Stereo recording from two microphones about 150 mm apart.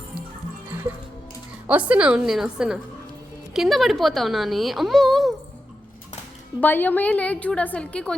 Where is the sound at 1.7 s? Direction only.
10° right (ahead or behind).